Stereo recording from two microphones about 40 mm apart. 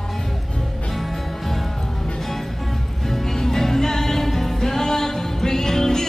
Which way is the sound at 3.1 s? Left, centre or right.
Centre.